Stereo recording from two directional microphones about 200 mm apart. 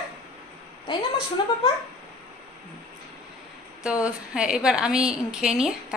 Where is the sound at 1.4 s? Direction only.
25° left (ahead or behind).